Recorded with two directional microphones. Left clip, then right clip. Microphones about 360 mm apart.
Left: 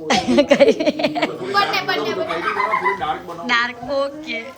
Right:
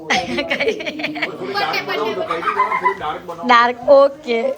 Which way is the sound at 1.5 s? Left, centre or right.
Left.